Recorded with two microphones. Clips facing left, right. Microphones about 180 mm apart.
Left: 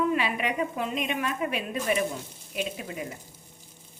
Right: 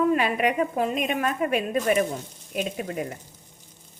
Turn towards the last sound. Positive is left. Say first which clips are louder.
# right 4 dB
turn(degrees=-50)  # may be behind; listen again after turning